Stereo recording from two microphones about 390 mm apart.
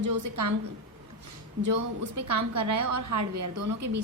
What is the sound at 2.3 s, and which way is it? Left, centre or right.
A woman's voice, right.